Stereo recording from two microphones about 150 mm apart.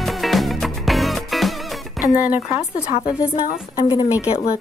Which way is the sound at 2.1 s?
10° right (ahead or behind).